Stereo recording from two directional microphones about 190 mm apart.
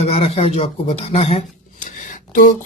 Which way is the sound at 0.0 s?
30° left (ahead or behind).